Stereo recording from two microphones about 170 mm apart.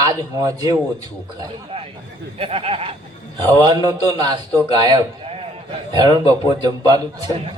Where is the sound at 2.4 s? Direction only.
35° right (ahead or behind).